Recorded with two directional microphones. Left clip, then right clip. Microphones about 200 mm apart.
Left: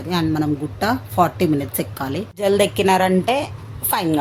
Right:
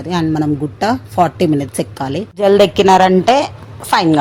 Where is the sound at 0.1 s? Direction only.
15° right (ahead or behind).